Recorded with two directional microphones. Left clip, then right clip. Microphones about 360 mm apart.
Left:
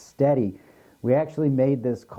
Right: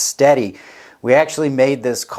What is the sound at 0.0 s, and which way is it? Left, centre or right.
Speech, centre.